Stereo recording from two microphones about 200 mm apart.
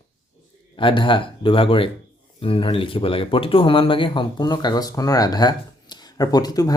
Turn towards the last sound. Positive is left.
turn(degrees=20)  # may be behind; listen again after turning